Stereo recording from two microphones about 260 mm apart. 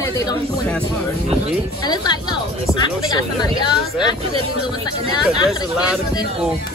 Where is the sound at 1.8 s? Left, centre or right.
Centre.